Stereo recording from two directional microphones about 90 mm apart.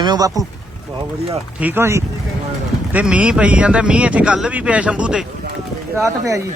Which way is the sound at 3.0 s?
10° right (ahead or behind).